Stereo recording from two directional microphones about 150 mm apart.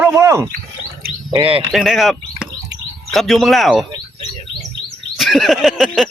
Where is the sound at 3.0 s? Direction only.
Centre (ahead or behind).